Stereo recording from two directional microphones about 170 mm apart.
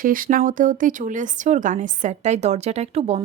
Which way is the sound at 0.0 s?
55° right (ahead or behind).